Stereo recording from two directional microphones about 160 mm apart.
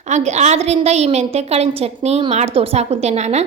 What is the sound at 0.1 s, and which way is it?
A woman's voice, 45° right (ahead or behind).